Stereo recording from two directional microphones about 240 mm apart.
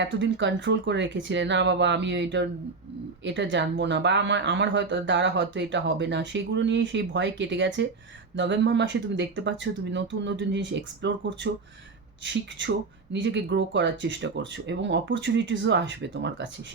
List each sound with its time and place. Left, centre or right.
0.0 s speech: right